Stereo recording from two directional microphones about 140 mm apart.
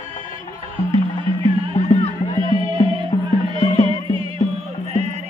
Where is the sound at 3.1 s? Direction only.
45° left (ahead or behind).